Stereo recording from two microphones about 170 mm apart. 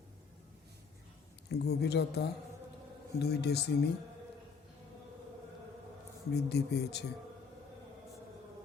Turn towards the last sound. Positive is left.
turn(degrees=75)  # may be behind; listen again after turning